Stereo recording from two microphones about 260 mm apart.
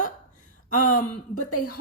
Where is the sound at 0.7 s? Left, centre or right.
Left.